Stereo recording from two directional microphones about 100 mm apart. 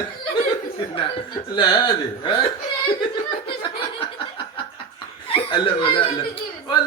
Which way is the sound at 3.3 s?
60° left (ahead or behind).